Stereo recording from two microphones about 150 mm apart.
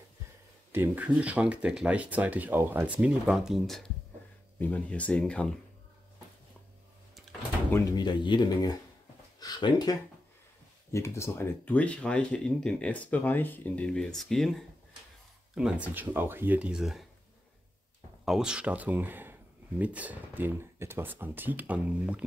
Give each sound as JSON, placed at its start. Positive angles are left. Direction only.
{"t": 0.7, "sound": "speech", "side_deg": -15}
{"t": 7.7, "sound": "speech", "side_deg": 25}
{"t": 10.9, "sound": "speech", "side_deg": 20}
{"t": 18.2, "sound": "speech", "side_deg": -5}